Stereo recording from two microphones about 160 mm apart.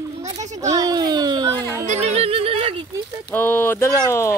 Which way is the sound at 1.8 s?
45° right (ahead or behind).